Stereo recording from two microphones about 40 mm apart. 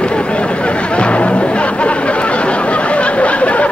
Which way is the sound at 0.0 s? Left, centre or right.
Left.